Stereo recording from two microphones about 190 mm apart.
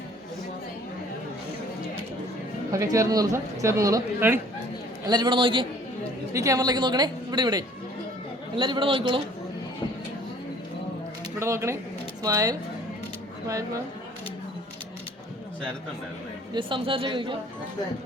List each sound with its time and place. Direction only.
2.7 s a woman's voice: 15° right (ahead or behind)
11.3 s a woman's voice: 15° right (ahead or behind)
16.6 s a woman's voice: 25° right (ahead or behind)